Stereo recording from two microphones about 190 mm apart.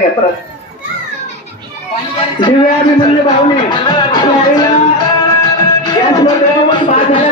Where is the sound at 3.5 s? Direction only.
25° left (ahead or behind).